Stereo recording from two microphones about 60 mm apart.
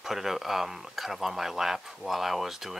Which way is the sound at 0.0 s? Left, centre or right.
Centre.